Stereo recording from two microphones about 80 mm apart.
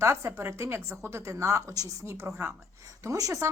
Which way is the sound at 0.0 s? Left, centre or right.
Right.